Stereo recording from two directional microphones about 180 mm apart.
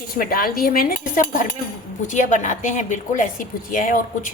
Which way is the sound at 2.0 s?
45° left (ahead or behind).